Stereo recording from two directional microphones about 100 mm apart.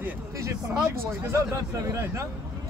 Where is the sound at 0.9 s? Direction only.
25° right (ahead or behind).